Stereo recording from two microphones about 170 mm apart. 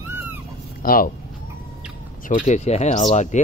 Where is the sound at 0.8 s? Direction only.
55° left (ahead or behind).